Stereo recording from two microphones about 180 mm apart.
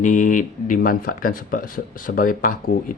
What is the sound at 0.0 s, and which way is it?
Speech, 45° left (ahead or behind).